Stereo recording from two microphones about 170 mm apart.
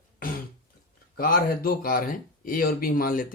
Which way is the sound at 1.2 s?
60° left (ahead or behind).